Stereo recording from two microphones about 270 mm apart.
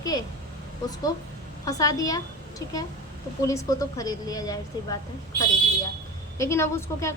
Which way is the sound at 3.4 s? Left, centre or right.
Centre.